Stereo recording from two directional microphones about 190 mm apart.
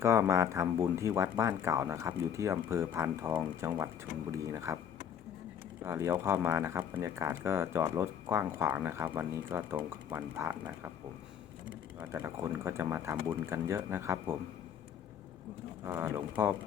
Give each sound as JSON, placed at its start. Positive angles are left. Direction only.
{"t": 0.0, "sound": "speech", "side_deg": -15}
{"t": 5.8, "sound": "speech", "side_deg": -15}
{"t": 11.9, "sound": "speech", "side_deg": -10}
{"t": 15.8, "sound": "speech", "side_deg": -15}